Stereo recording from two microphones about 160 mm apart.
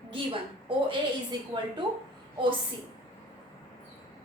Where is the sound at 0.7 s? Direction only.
30° right (ahead or behind).